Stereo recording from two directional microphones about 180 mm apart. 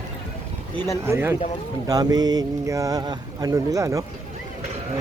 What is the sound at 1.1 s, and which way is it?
Speech, 15° right (ahead or behind).